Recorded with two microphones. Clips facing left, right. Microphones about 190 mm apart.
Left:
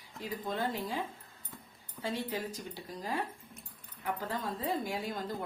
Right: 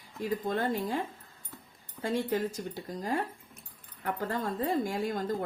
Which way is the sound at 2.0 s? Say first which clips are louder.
Right 6 dB; 50° right (ahead or behind).